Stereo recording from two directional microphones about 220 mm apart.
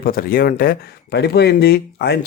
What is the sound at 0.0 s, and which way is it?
Speech, 40° left (ahead or behind).